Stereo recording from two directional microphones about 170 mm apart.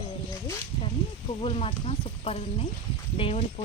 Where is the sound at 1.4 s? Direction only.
35° left (ahead or behind).